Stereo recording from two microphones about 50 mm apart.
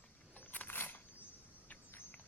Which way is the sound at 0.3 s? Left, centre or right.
Left.